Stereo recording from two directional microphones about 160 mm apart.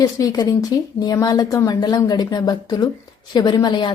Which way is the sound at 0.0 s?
20° left (ahead or behind).